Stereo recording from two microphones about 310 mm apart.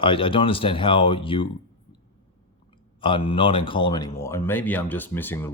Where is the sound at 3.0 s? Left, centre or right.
Centre.